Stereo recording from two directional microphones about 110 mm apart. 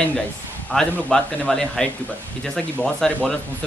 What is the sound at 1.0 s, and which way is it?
A man's voice, 5° left (ahead or behind).